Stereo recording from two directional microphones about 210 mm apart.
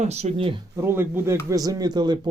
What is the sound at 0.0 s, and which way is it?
Speech, 30° right (ahead or behind).